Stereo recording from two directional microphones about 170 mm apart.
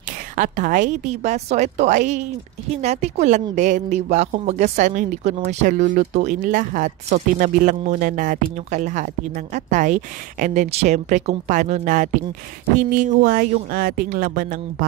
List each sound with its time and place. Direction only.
0.4 s a woman's voice: 50° right (ahead or behind)